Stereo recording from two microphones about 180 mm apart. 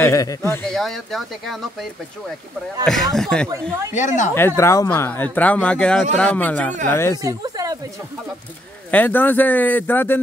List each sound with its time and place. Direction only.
0.0 s speech: 20° left (ahead or behind)
0.7 s speech: centre (ahead or behind)
3.9 s speech: 45° left (ahead or behind)
4.4 s speech: 15° left (ahead or behind)
7.2 s speech: 20° right (ahead or behind)
8.9 s speech: 10° left (ahead or behind)